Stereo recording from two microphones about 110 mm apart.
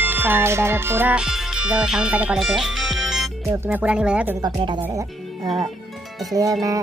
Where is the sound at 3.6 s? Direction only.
15° right (ahead or behind).